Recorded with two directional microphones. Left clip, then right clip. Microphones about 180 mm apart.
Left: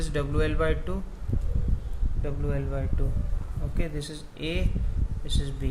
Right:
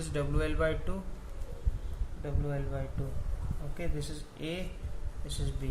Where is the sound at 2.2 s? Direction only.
35° left (ahead or behind).